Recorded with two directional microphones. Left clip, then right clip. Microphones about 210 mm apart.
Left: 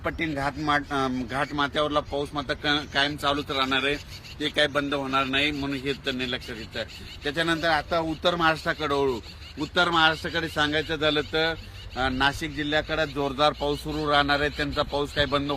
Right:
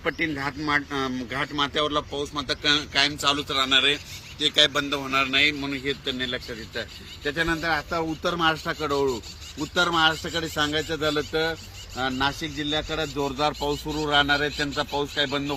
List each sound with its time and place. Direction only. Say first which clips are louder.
0.0 s speech: right 1 dB; 55° left (ahead or behind); by 6.8 s 40° left (ahead or behind)
7.3 s a man's voice: left 1 dB; 25° left (ahead or behind); by 9.2 s centre (ahead or behind)
9.6 s a man's voice: even; 10° right (ahead or behind); by 15.5 s 20° left (ahead or behind)